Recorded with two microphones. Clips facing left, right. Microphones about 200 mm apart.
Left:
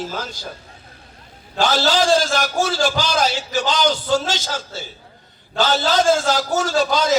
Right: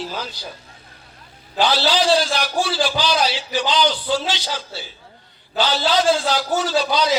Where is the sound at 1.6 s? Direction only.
45° left (ahead or behind).